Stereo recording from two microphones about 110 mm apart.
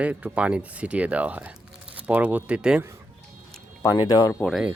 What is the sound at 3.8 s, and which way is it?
Speech, 35° left (ahead or behind).